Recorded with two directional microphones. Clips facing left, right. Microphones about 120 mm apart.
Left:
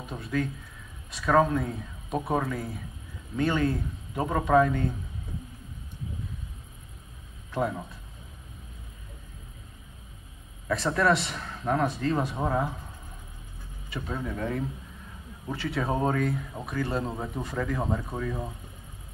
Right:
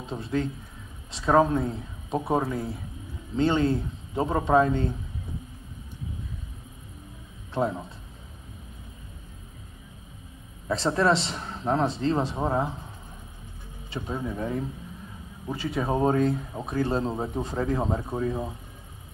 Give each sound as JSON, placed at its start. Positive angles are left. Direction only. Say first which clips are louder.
{"t": 0.0, "sound": "a man's voice", "louder": "right 2 dB", "side_deg": -25}
{"t": 7.5, "sound": "a man's voice", "louder": "right 2 dB", "side_deg": -25}
{"t": 10.7, "sound": "a man's voice", "louder": "right 1 dB", "side_deg": -25}
{"t": 13.8, "sound": "vehicle", "louder": "right 2 dB", "side_deg": -30}
{"t": 14.1, "sound": "a man's voice", "louder": "right 1 dB", "side_deg": -20}